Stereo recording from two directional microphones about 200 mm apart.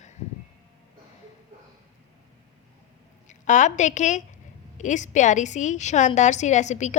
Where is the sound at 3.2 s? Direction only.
40° left (ahead or behind).